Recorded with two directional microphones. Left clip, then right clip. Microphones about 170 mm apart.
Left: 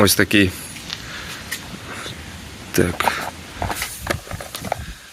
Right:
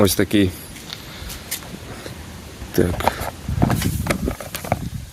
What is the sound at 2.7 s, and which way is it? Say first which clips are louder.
Speech: left 1 dB; 15° right (ahead or behind).